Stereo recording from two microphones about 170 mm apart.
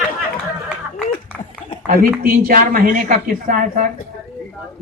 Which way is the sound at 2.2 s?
60° right (ahead or behind).